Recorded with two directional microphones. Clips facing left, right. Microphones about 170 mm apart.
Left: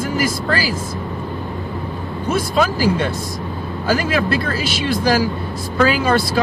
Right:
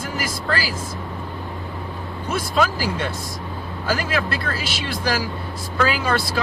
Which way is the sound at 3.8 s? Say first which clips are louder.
Left 5 dB; 15° left (ahead or behind).